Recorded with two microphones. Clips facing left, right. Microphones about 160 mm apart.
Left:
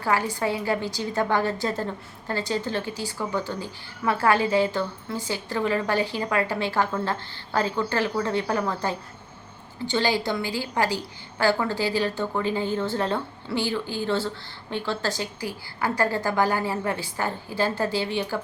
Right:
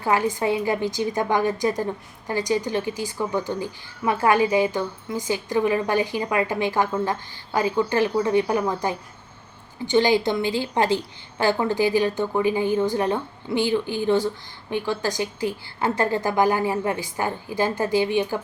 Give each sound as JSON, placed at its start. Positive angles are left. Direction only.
{"t": 0.0, "sound": "a woman's voice", "side_deg": -20}